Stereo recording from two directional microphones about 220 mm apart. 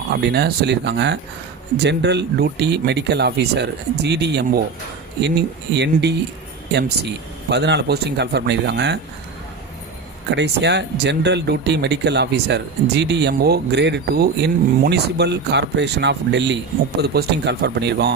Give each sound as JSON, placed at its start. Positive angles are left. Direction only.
{"t": 0.1, "sound": "speech", "side_deg": -50}
{"t": 10.3, "sound": "speech", "side_deg": -50}